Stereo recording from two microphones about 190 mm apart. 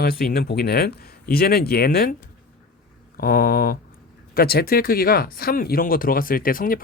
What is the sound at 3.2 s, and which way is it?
Speech, 50° left (ahead or behind).